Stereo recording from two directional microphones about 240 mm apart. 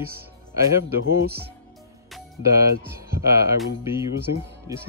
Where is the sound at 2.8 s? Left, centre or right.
Centre.